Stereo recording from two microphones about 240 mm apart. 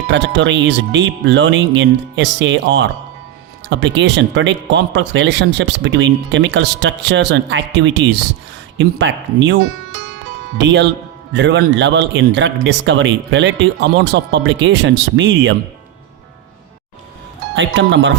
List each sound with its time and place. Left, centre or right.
0.1 s speech: right
17.5 s speech: right